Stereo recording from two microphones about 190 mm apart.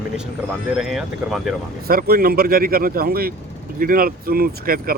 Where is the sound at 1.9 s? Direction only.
50° right (ahead or behind).